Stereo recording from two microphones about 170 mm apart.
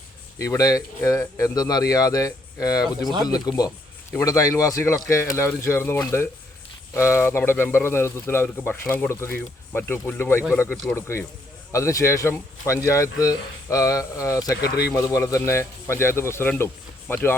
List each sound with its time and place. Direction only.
0.3 s speech: 20° left (ahead or behind)